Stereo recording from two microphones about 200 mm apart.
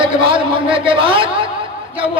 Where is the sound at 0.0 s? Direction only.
25° right (ahead or behind).